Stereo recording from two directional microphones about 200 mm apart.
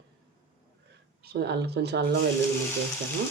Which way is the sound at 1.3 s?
55° right (ahead or behind).